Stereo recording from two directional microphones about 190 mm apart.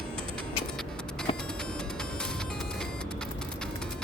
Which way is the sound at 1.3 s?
30° left (ahead or behind).